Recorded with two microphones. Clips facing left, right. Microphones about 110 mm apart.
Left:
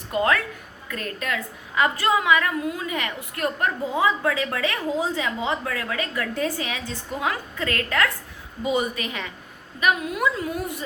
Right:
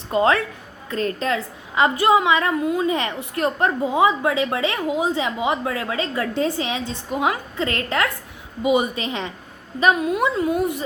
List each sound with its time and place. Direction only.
0.1 s a woman's voice: 25° right (ahead or behind)